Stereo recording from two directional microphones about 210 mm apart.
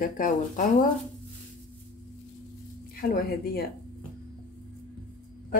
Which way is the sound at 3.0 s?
45° left (ahead or behind).